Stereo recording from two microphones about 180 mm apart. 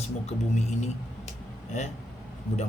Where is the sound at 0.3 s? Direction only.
40° left (ahead or behind).